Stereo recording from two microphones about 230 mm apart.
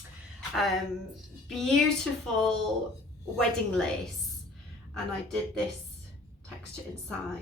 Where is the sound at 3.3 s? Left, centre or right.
Centre.